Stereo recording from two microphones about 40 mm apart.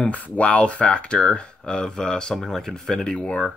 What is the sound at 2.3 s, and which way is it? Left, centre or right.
Speech, centre.